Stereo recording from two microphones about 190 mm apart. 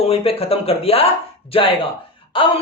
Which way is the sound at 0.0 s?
30° left (ahead or behind).